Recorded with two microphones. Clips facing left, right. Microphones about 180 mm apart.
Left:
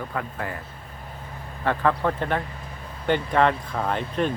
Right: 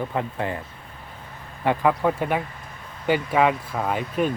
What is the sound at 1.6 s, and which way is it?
Speech, 10° right (ahead or behind).